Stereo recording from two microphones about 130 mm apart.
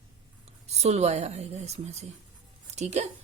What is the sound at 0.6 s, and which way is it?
Speech, 55° right (ahead or behind).